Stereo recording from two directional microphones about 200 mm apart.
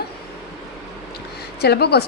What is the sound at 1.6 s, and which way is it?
Speech, 55° left (ahead or behind).